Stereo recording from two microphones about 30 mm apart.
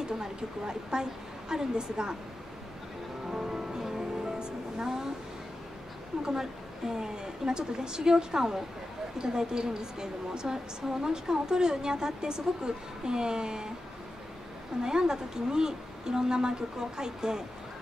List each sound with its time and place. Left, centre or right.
0.0 s a woman's voice: right
3.3 s music: right
6.3 s a woman's voice: centre
14.8 s a woman's voice: right